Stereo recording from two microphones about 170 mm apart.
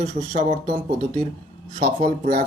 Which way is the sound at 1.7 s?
50° right (ahead or behind).